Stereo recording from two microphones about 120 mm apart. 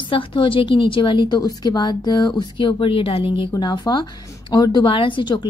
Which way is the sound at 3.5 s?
35° left (ahead or behind).